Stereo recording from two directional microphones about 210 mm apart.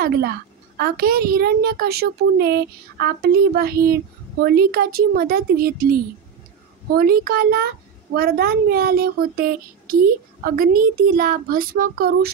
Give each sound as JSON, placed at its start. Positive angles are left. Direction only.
{"t": 0.0, "sound": "a woman's voice", "side_deg": -45}